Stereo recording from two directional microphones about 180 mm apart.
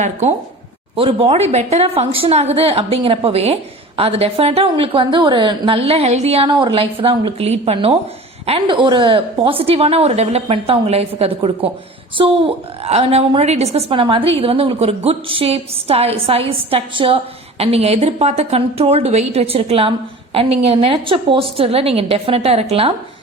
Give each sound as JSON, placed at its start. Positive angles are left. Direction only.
{"t": 0.0, "sound": "speech", "side_deg": -40}